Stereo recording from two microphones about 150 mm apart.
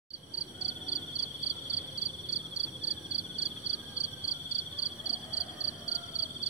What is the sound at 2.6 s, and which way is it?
Cricket, 20° left (ahead or behind).